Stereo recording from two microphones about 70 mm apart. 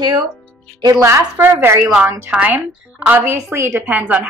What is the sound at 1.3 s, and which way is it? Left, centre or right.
Speech, right.